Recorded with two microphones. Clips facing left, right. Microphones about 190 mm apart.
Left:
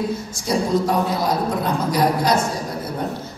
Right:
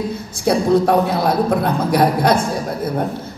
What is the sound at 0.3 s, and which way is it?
A woman's voice, 60° right (ahead or behind).